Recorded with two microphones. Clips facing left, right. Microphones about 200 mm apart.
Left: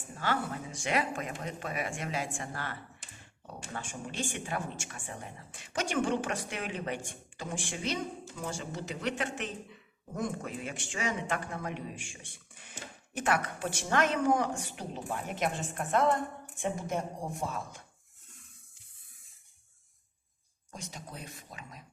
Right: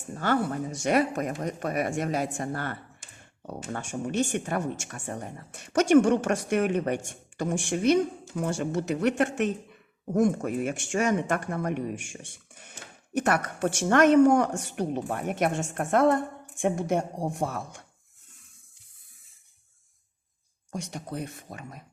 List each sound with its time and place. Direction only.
0.2 s speech: 45° right (ahead or behind)
7.9 s a woman's voice: 60° right (ahead or behind)
8.9 s speech: 55° right (ahead or behind)
10.3 s speech: 45° right (ahead or behind)
13.6 s speech: 60° right (ahead or behind)
14.2 s a woman's voice: 75° right (ahead or behind)
20.7 s a woman's voice: 65° right (ahead or behind)